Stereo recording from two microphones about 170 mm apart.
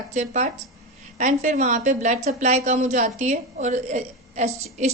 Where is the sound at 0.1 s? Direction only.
45° right (ahead or behind).